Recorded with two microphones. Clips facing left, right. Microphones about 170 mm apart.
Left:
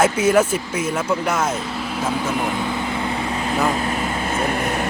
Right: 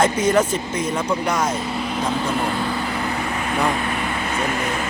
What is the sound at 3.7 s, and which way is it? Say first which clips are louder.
Vehicle: left 1 dB; 30° left (ahead or behind).